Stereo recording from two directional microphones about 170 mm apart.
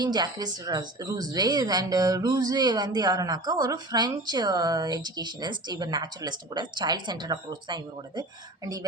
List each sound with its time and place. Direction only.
0.0 s a woman's voice: 25° right (ahead or behind)